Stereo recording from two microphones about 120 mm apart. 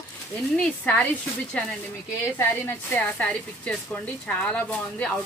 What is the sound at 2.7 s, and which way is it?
Speech, 15° left (ahead or behind).